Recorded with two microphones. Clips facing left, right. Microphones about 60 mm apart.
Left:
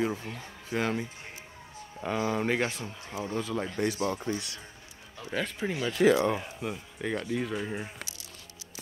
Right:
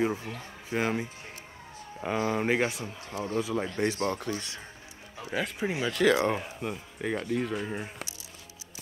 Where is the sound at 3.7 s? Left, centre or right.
Right.